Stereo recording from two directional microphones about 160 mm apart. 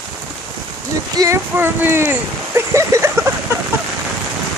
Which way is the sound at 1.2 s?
15° right (ahead or behind).